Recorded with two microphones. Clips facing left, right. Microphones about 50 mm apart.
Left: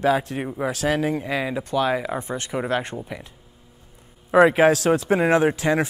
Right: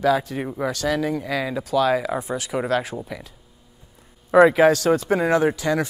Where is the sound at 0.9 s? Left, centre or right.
Left.